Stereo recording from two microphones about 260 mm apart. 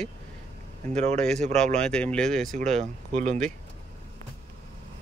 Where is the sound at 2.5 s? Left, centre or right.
Right.